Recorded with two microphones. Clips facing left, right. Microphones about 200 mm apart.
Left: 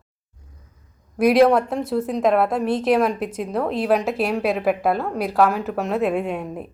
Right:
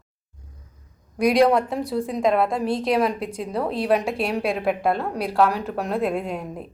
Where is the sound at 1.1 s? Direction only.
5° left (ahead or behind).